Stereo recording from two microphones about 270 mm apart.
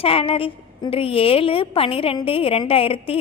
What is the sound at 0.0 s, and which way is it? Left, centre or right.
A woman's voice, left.